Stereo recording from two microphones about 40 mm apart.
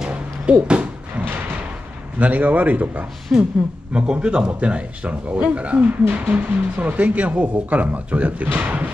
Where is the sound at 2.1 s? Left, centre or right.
Right.